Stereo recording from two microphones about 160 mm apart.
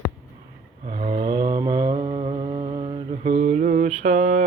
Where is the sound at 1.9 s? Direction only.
35° right (ahead or behind).